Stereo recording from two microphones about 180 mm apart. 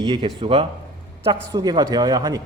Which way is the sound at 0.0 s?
25° right (ahead or behind).